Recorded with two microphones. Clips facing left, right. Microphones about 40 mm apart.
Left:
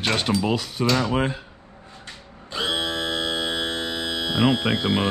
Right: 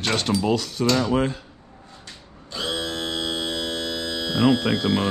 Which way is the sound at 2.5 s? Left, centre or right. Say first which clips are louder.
Left 2 dB; left.